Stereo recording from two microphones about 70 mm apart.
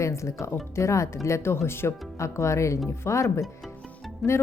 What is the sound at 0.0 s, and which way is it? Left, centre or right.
Speech, left.